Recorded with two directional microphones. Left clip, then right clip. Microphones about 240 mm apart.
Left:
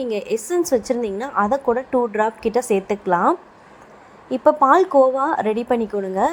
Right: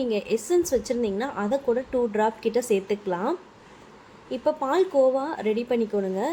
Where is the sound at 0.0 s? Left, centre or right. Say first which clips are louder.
Left 3 dB; left.